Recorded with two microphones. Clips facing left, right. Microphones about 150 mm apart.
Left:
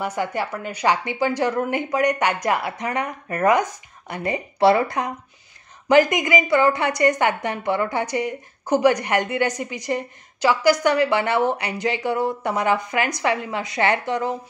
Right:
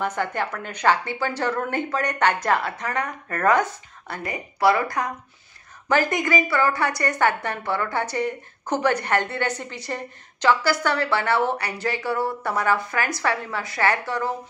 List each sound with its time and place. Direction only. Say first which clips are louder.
0.0 s a woman's voice: left 1 dB; 10° left (ahead or behind)
4.2 s a woman's voice: left 4 dB; 25° left (ahead or behind)